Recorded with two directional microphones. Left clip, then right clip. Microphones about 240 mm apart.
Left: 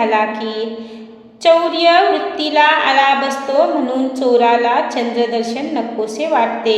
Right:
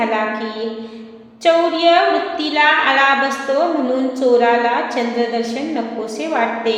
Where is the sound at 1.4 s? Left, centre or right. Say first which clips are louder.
Left 2 dB; left.